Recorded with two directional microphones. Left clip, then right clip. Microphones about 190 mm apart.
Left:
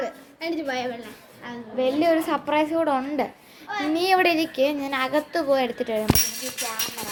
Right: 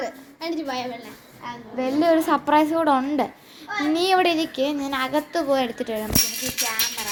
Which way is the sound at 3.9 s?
5° right (ahead or behind).